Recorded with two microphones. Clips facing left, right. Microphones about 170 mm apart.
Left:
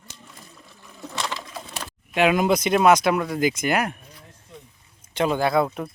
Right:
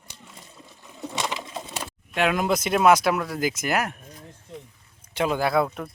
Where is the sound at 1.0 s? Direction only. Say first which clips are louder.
Right 1 dB; 20° right (ahead or behind).